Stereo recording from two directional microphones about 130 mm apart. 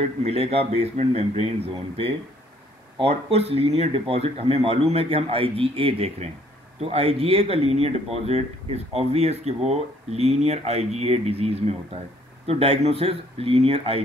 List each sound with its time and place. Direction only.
0.2 s speech: 50° right (ahead or behind)